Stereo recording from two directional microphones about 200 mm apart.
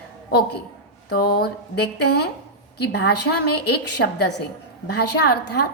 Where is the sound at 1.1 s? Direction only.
50° left (ahead or behind).